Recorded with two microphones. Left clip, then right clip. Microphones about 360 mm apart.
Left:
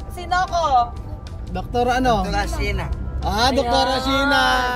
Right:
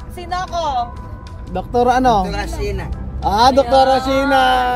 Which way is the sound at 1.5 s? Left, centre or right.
Centre.